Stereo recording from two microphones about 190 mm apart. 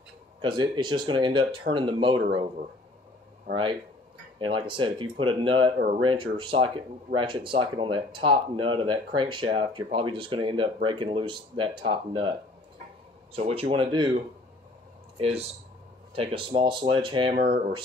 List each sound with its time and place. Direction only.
0.4 s speech: 25° right (ahead or behind)
4.4 s speech: 25° right (ahead or behind)
17.4 s speech: 50° right (ahead or behind)